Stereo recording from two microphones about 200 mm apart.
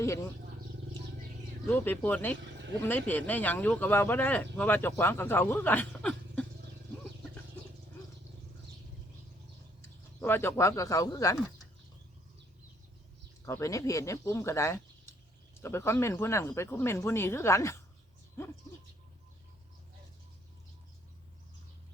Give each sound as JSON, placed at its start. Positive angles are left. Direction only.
{"t": 1.6, "sound": "speech", "side_deg": 10}
{"t": 10.2, "sound": "speech", "side_deg": 10}
{"t": 13.4, "sound": "speech", "side_deg": 15}